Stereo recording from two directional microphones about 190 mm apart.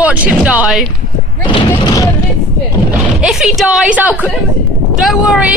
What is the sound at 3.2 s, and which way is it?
A woman's voice, 5° right (ahead or behind).